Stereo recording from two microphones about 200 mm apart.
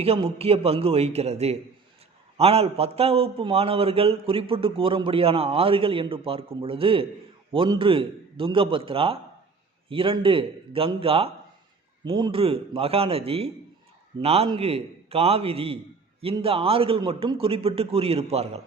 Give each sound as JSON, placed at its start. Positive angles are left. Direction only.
{"t": 0.0, "sound": "a man's voice", "side_deg": -30}